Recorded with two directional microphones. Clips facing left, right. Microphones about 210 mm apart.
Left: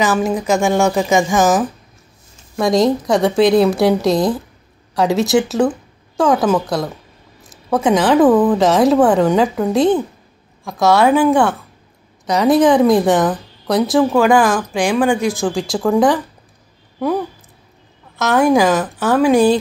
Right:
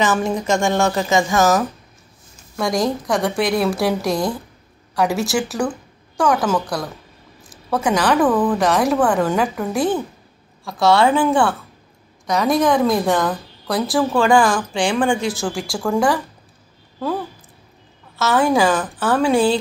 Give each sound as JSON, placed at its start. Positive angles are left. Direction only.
{"t": 0.0, "sound": "a woman's voice", "side_deg": 5}
{"t": 2.5, "sound": "a woman's voice", "side_deg": 20}
{"t": 12.6, "sound": "a woman's voice", "side_deg": 20}
{"t": 18.1, "sound": "a woman's voice", "side_deg": 15}